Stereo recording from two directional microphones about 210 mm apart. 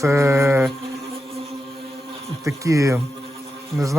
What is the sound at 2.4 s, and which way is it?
Speech, 15° right (ahead or behind).